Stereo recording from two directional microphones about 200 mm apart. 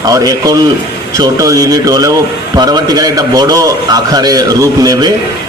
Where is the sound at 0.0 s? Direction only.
20° right (ahead or behind).